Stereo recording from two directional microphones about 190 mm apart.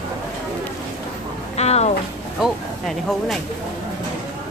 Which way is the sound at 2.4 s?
Centre (ahead or behind).